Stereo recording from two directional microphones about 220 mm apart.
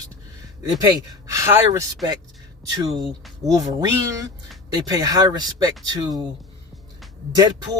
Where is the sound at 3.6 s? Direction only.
15° right (ahead or behind).